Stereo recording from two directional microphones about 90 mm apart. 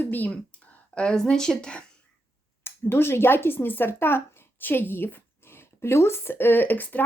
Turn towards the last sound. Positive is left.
turn(degrees=20)  # may be behind; listen again after turning